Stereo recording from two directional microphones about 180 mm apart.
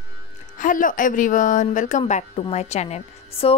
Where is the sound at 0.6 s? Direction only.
45° left (ahead or behind).